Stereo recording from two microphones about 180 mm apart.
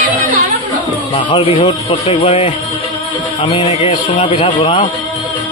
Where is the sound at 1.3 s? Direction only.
30° left (ahead or behind).